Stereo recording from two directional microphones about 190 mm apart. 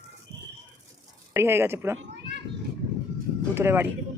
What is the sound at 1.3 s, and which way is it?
Speech, 15° right (ahead or behind).